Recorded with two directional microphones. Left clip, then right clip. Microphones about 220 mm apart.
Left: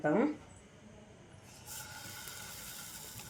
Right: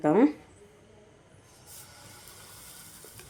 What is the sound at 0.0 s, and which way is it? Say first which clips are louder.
Speech: right 8 dB; 50° right (ahead or behind).